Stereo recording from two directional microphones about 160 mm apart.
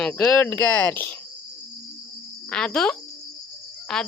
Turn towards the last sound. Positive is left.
turn(degrees=5)  # may be behind; listen again after turning